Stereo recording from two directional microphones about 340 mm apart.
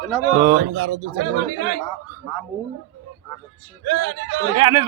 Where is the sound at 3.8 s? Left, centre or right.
Right.